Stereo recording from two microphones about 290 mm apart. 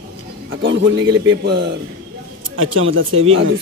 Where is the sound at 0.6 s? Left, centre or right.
Right.